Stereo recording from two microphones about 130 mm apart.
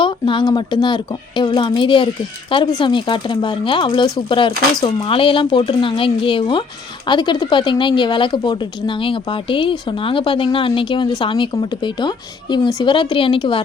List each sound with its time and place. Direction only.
0.0 s speech: 40° left (ahead or behind)